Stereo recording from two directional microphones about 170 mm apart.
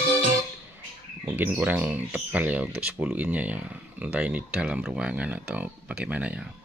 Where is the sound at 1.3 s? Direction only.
10° right (ahead or behind).